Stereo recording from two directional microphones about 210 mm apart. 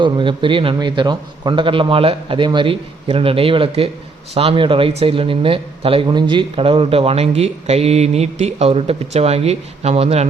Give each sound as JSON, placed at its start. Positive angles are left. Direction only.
{"t": 0.0, "sound": "speech", "side_deg": -25}